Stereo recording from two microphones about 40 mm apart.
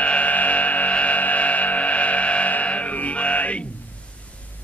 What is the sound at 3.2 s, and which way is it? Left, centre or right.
Music, left.